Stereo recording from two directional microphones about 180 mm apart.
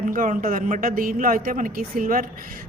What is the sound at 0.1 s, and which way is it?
Speech, 50° right (ahead or behind).